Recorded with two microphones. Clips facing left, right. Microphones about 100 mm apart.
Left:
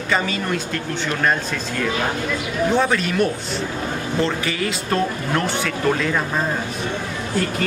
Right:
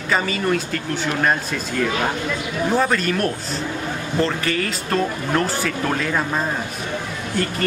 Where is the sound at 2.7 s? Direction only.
Centre (ahead or behind).